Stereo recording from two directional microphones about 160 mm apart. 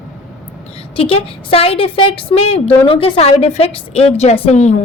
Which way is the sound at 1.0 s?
35° left (ahead or behind).